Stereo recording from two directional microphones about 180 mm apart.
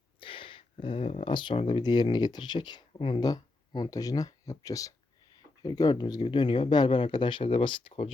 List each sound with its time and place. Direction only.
0.2 s speech: 30° left (ahead or behind)